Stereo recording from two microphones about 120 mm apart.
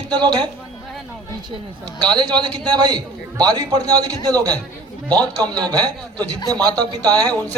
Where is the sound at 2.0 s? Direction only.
35° right (ahead or behind).